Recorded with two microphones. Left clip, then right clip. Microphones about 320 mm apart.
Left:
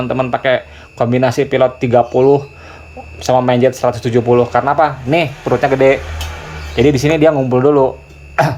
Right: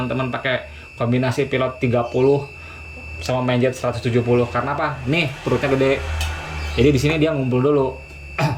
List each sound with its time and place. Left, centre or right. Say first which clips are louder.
0.1 s speech: left 10 dB; centre